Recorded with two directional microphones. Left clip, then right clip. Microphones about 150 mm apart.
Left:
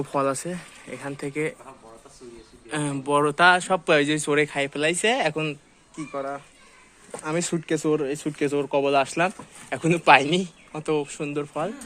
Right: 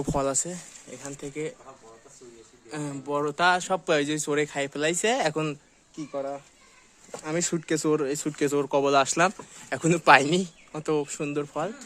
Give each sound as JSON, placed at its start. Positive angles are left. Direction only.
{"t": 0.1, "sound": "speech", "side_deg": -25}
{"t": 0.9, "sound": "speech", "side_deg": 0}
{"t": 2.6, "sound": "a man's voice", "side_deg": 5}
{"t": 3.3, "sound": "speech", "side_deg": -5}
{"t": 3.6, "sound": "speech", "side_deg": -15}
{"t": 6.0, "sound": "speech", "side_deg": -20}
{"t": 7.2, "sound": "speech", "side_deg": -30}